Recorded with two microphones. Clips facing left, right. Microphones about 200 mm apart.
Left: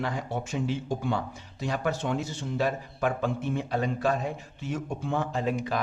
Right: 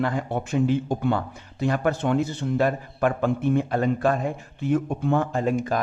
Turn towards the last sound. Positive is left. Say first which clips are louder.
# right 5 dB
turn(degrees=-45)  # may be behind; listen again after turning